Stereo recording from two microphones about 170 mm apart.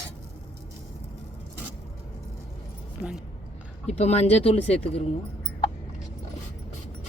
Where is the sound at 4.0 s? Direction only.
40° left (ahead or behind).